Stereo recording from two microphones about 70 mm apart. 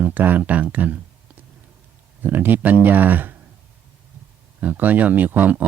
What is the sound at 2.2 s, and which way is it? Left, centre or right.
Speech, right.